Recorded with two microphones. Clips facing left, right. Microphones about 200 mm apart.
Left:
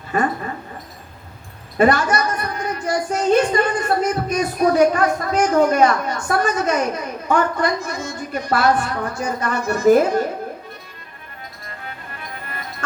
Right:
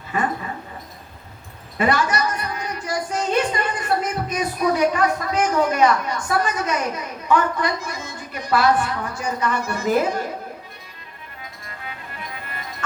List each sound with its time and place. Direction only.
0.1 s a woman's voice: 45° left (ahead or behind)
1.8 s a woman's voice: 45° left (ahead or behind)